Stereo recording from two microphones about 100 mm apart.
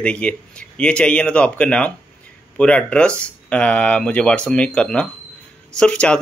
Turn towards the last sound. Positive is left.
turn(degrees=10)  # may be behind; listen again after turning